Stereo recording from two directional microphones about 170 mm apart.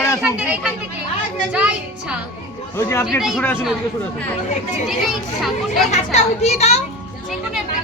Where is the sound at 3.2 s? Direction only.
Centre (ahead or behind).